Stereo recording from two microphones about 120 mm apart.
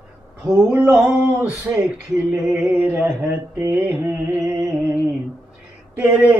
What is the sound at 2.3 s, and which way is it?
Music, 20° right (ahead or behind).